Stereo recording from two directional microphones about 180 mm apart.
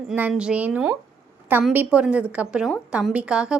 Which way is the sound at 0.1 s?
5° right (ahead or behind).